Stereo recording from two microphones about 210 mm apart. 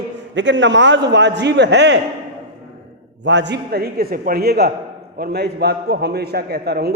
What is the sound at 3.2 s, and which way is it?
A man's voice, 55° right (ahead or behind).